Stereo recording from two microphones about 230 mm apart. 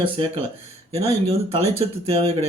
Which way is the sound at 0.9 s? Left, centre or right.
Right.